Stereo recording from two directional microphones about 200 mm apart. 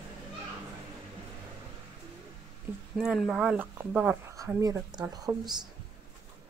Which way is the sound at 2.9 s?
5° right (ahead or behind).